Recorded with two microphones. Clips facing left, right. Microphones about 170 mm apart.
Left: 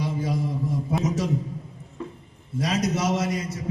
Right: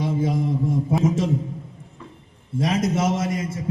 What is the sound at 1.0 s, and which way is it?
Speech, 25° right (ahead or behind).